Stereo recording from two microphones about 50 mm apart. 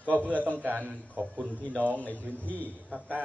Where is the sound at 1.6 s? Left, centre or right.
Left.